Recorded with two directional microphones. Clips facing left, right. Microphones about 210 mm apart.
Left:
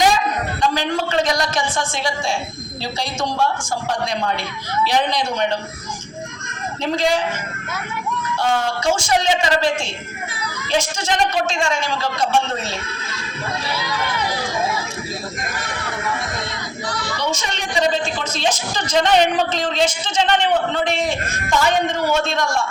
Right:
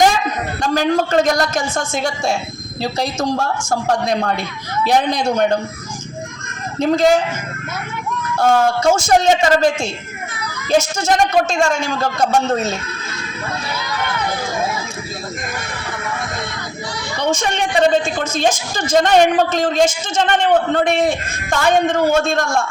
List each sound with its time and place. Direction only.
0.6 s a woman's voice: 45° right (ahead or behind)
6.7 s a woman's voice: 45° right (ahead or behind)
8.4 s a woman's voice: 45° right (ahead or behind)
17.2 s a woman's voice: 55° right (ahead or behind)